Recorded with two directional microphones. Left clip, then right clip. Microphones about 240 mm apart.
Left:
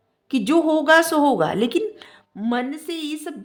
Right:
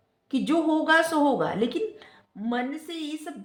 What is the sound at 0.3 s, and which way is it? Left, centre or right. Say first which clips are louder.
A woman's voice: left 6 dB; left.